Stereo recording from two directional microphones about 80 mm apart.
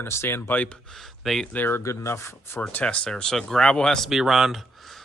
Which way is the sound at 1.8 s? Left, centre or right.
Left.